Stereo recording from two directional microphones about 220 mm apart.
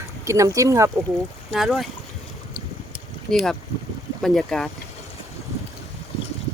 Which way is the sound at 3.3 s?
Centre (ahead or behind).